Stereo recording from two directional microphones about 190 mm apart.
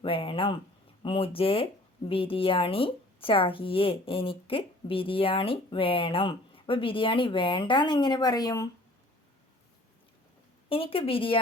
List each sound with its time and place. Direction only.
0.0 s a woman's voice: 30° left (ahead or behind)
10.7 s a woman's voice: 30° left (ahead or behind)